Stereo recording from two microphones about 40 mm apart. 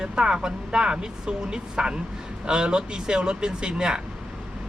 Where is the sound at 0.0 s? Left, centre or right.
Right.